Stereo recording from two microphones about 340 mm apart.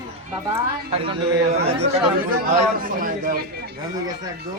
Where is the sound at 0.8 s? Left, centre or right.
Centre.